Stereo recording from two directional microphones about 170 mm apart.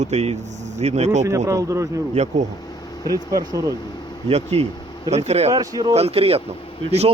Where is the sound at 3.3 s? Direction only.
20° right (ahead or behind).